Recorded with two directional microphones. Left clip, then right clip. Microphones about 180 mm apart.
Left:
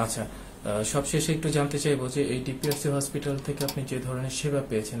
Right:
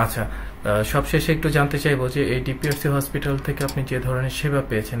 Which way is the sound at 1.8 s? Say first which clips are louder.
Right 5 dB; 30° right (ahead or behind).